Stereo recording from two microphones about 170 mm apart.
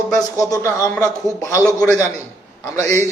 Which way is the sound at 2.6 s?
15° left (ahead or behind).